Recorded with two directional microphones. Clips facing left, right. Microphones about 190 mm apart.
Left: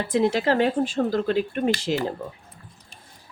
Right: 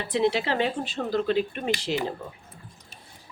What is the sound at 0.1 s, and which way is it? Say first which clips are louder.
Speech: left 3 dB; 45° left (ahead or behind).